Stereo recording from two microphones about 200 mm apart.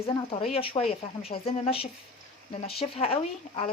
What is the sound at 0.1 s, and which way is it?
Speech, 25° left (ahead or behind).